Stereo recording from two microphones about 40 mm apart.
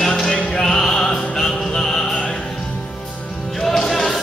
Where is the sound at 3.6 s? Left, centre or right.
Centre.